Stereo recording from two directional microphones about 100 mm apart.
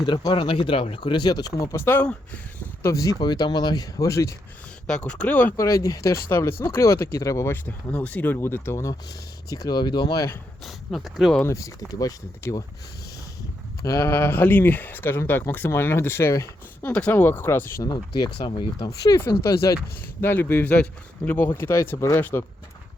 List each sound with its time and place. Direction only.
0.0 s speech: 45° left (ahead or behind)
1.7 s speech: 20° left (ahead or behind)
2.8 s speech: 35° left (ahead or behind)
4.9 s speech: 10° left (ahead or behind)
5.5 s speech: 30° left (ahead or behind)
10.6 s speech: centre (ahead or behind)
11.4 s speech: 30° left (ahead or behind)
13.8 s speech: 25° left (ahead or behind)
16.9 s speech: 15° left (ahead or behind)
17.8 s speech: 45° left (ahead or behind)
19.2 s speech: 30° left (ahead or behind)
22.2 s speech: 20° left (ahead or behind)